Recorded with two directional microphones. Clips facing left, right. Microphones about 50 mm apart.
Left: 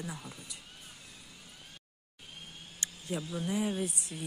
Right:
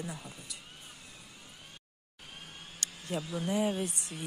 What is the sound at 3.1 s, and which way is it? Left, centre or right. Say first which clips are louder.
Speech: right 1 dB; centre.